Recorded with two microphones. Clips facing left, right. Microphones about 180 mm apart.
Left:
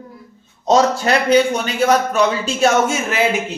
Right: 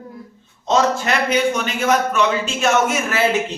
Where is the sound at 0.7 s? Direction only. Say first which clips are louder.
Left 3 dB; 35° left (ahead or behind).